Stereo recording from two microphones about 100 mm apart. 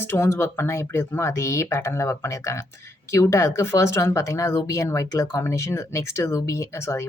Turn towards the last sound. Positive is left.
turn(degrees=25)  # may be behind; listen again after turning